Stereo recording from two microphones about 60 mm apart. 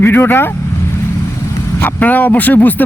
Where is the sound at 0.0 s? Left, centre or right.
Left.